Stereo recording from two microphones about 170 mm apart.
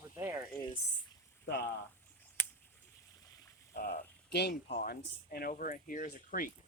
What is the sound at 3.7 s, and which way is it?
Speech, 65° left (ahead or behind).